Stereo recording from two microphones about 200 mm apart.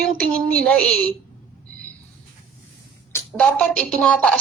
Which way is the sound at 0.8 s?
45° right (ahead or behind).